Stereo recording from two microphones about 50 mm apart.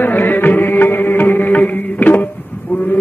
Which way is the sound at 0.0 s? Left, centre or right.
Left.